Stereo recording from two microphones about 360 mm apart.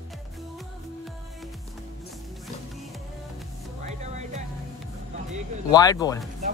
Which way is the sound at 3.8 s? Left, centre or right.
Centre.